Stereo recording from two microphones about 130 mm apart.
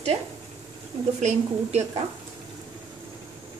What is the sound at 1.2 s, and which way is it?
Speech, 60° right (ahead or behind).